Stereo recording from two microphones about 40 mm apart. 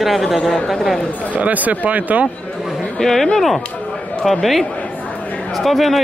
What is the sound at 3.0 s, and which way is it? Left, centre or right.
Speech, centre.